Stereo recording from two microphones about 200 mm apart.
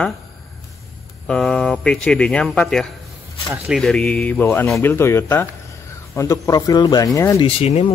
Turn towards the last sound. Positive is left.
turn(degrees=30)  # may be behind; listen again after turning